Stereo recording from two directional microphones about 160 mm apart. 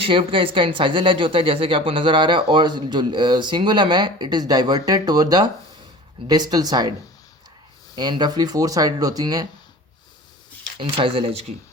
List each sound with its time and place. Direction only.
0.0 s speech: 35° right (ahead or behind)
7.9 s speech: 25° right (ahead or behind)
10.8 s speech: 35° right (ahead or behind)